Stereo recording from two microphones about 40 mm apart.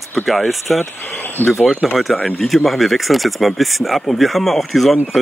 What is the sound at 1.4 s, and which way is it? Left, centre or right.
Speech, left.